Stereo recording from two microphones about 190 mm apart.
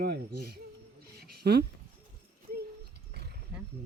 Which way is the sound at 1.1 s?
55° right (ahead or behind).